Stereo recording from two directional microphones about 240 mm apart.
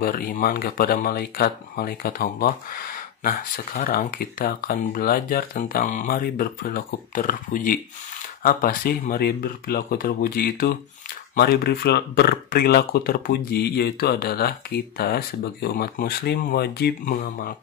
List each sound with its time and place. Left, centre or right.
0.0 s speech: left